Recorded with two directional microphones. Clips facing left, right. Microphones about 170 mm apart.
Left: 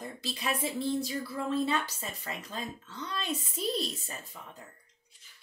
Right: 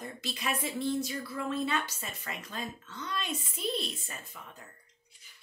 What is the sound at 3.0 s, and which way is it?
Speech, 35° left (ahead or behind).